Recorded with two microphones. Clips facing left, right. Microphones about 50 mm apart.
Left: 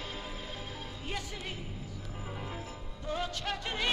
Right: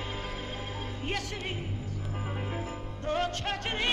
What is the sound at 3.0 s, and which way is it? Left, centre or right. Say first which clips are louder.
Music: right 5 dB; right.